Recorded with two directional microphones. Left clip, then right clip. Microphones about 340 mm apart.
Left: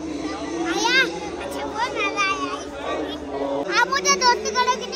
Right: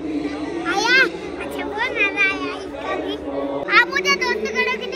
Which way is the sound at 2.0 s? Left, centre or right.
Centre.